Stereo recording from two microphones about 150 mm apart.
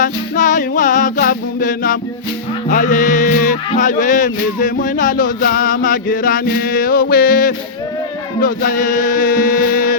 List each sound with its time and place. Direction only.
0.0 s music: 60° left (ahead or behind)